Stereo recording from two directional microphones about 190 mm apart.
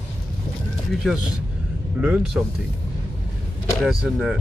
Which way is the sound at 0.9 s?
Centre (ahead or behind).